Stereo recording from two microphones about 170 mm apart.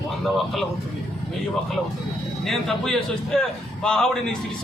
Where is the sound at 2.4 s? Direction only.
Centre (ahead or behind).